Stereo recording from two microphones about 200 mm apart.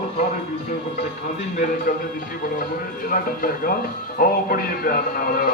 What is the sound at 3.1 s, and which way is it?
Speech, 45° left (ahead or behind).